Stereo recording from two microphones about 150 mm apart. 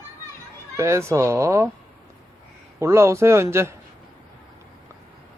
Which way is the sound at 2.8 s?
20° right (ahead or behind).